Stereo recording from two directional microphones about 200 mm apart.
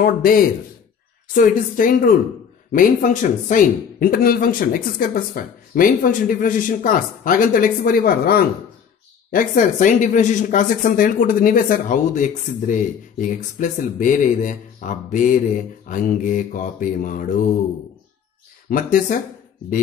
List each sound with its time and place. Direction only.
0.0 s speech: 45° left (ahead or behind)
18.7 s speech: 45° left (ahead or behind)